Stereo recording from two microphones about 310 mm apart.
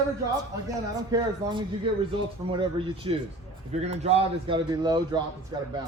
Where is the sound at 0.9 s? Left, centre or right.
Centre.